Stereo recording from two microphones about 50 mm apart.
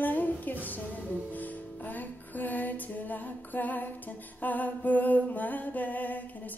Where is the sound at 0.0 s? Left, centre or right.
Left.